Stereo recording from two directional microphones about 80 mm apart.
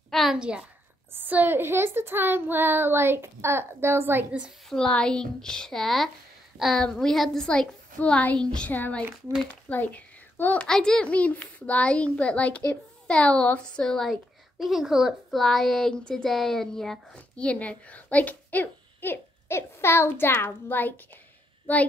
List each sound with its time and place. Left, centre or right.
0.1 s a sound: centre
0.4 s a woman's voice: centre
1.1 s speech: right
4.9 s a woman's voice: centre
8.7 s a child's voice: left
10.7 s a woman's voice: centre